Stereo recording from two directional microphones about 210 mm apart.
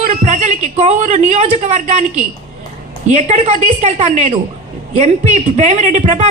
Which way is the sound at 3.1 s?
30° right (ahead or behind).